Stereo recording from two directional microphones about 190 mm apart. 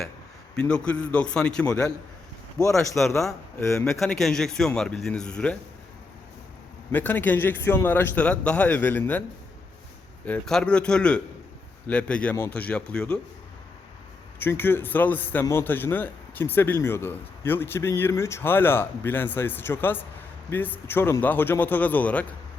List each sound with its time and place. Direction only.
0.5 s a man's voice: 5° left (ahead or behind)
2.6 s a man's voice: 15° left (ahead or behind)
4.0 s a man's voice: centre (ahead or behind)
6.9 s a man's voice: 10° left (ahead or behind)
10.2 s a man's voice: 5° left (ahead or behind)
14.3 s a man's voice: 10° left (ahead or behind)